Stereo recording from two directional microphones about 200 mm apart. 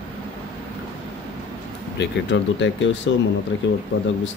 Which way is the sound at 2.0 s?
65° left (ahead or behind).